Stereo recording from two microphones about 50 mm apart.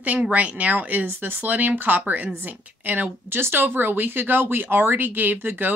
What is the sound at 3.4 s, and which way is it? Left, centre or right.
Speech, right.